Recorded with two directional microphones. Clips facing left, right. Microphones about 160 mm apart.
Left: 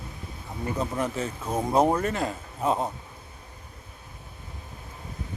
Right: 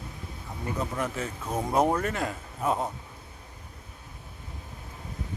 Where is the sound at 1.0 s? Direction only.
30° left (ahead or behind).